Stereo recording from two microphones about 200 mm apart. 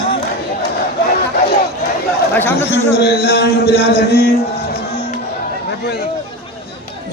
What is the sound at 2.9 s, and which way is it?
Speech, 55° left (ahead or behind).